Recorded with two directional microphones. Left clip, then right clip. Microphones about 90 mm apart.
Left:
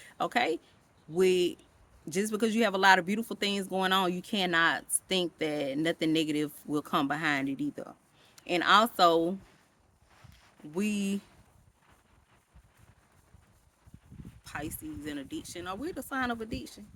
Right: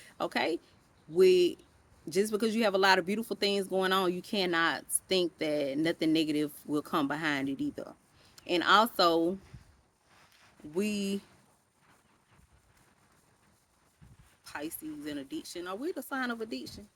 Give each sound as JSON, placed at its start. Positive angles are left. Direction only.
{"t": 0.0, "sound": "speech", "side_deg": 45}
{"t": 10.8, "sound": "speech", "side_deg": 40}
{"t": 14.4, "sound": "speech", "side_deg": 40}